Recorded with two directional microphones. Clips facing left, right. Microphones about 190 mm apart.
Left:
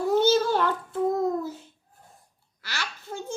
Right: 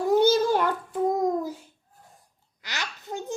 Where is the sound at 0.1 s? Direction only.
15° right (ahead or behind).